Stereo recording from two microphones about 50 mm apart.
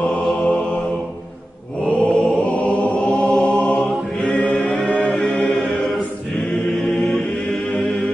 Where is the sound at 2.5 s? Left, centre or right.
Left.